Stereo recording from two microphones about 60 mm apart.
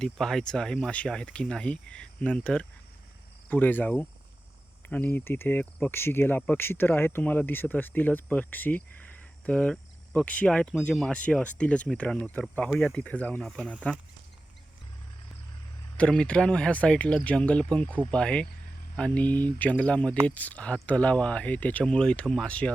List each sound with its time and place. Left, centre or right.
0.0 s speech: centre
3.5 s speech: left
5.0 s speech: left
9.5 s speech: centre
16.0 s speech: centre